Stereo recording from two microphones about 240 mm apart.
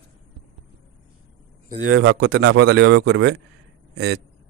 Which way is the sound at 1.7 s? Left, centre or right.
Right.